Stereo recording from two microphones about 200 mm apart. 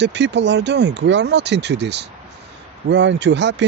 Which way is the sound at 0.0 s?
60° right (ahead or behind).